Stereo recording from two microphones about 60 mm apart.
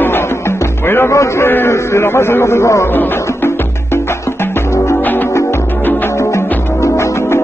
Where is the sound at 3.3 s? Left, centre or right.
Left.